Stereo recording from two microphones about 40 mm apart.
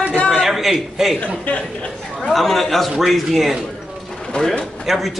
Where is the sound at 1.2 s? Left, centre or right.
Left.